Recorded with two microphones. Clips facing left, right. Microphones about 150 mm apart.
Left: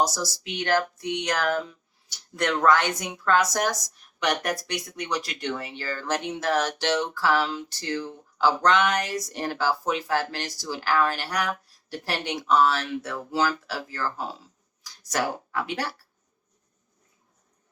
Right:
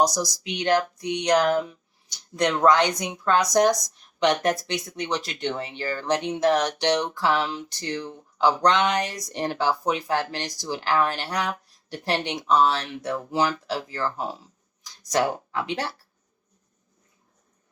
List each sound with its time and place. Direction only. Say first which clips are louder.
0.0 s a woman's voice: right 3 dB; 15° right (ahead or behind)